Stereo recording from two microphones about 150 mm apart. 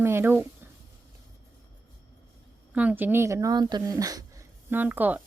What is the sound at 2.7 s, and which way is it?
Speech, 10° right (ahead or behind).